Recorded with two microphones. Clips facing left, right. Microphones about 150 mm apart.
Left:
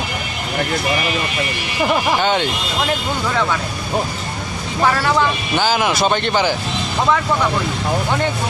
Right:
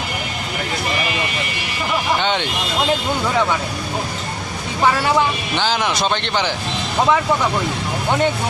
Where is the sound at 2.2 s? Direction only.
5° left (ahead or behind).